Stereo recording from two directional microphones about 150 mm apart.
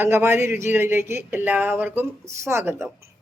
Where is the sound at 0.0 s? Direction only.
15° right (ahead or behind).